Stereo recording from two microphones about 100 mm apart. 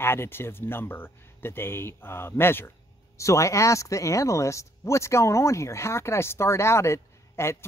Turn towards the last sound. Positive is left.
turn(degrees=25)  # may be behind; listen again after turning